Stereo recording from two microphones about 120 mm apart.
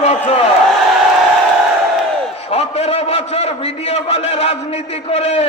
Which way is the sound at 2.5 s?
60° left (ahead or behind).